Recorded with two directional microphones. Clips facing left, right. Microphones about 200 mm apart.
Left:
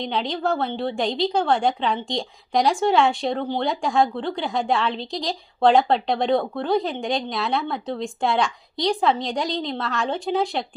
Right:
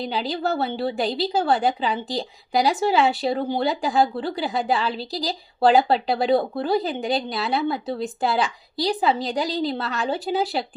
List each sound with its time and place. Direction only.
0.0 s a woman's voice: 5° right (ahead or behind)